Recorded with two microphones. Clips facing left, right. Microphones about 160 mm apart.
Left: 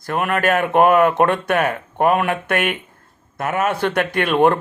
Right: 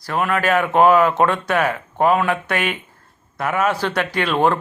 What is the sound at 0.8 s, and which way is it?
Speech, 55° left (ahead or behind).